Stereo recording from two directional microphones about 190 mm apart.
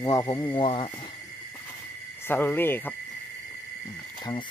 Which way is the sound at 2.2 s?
10° left (ahead or behind).